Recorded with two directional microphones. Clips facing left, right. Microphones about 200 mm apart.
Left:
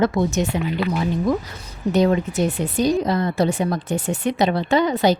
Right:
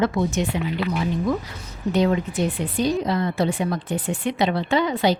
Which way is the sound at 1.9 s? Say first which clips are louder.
Left 3 dB; 45° left (ahead or behind).